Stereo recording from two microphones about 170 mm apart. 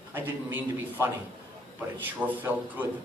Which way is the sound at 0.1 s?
10° right (ahead or behind).